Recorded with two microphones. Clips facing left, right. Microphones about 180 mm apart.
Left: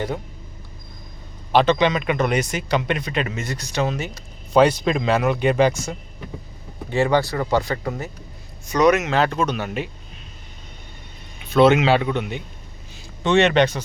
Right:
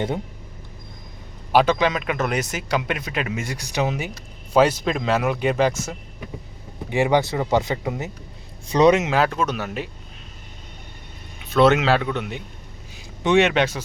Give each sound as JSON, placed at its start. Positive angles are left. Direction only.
{"t": 1.5, "sound": "speech", "side_deg": -5}
{"t": 6.9, "sound": "speech", "side_deg": -15}
{"t": 9.0, "sound": "speech", "side_deg": -5}
{"t": 11.5, "sound": "speech", "side_deg": 0}